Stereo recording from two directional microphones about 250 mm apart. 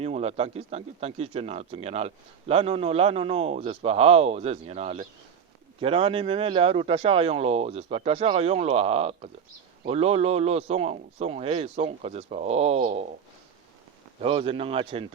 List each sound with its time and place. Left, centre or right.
0.0 s speech: right
14.2 s speech: right